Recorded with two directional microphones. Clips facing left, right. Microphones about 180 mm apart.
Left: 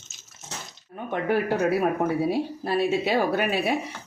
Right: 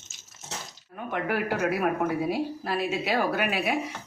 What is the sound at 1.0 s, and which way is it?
A man's voice, 25° left (ahead or behind).